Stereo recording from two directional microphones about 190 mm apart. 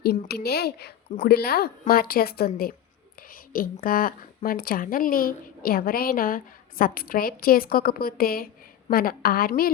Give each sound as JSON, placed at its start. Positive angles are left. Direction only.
{"t": 0.0, "sound": "a woman's voice", "side_deg": 55}